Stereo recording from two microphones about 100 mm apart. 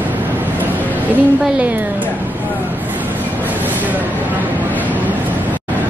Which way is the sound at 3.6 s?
15° right (ahead or behind).